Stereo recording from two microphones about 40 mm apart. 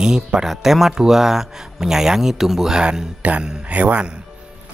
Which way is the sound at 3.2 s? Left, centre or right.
Right.